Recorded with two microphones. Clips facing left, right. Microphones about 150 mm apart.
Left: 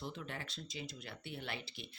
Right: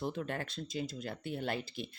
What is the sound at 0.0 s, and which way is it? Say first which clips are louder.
Speech: right 8 dB; 50° right (ahead or behind).